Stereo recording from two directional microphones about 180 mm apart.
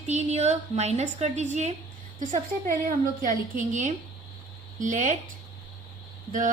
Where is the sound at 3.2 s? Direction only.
50° right (ahead or behind).